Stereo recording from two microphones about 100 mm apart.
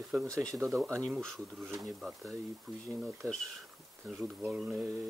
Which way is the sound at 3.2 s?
15° left (ahead or behind).